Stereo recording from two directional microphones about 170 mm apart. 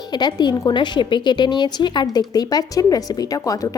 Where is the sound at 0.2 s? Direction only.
25° left (ahead or behind).